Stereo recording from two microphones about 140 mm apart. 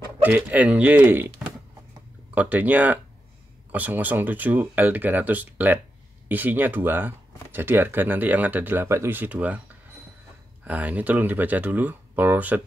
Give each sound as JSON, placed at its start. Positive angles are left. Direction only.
{"t": 0.2, "sound": "speech", "side_deg": -10}
{"t": 10.6, "sound": "speech", "side_deg": -10}